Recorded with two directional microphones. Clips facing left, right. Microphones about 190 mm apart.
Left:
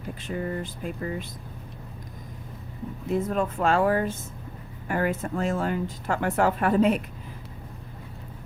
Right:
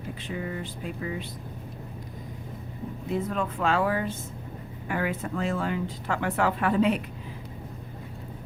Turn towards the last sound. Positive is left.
turn(degrees=45)  # may be behind; listen again after turning